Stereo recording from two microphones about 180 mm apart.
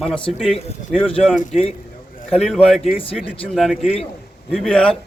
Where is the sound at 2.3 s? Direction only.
Centre (ahead or behind).